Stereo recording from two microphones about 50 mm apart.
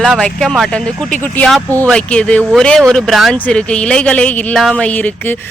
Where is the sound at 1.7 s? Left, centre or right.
Left.